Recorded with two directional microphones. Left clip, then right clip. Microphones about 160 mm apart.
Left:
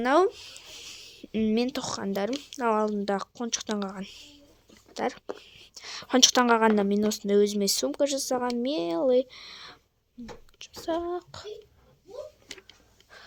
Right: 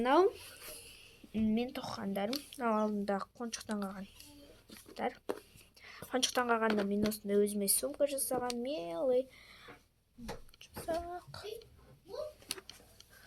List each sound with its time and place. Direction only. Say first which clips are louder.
0.0 s a child's voice: left 6 dB; 45° left (ahead or behind); by 11.4 s 70° left (ahead or behind)